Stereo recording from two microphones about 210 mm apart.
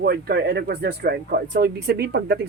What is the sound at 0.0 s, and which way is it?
Speech, 50° right (ahead or behind).